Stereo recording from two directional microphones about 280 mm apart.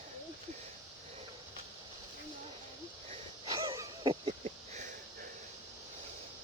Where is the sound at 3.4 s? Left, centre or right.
Centre.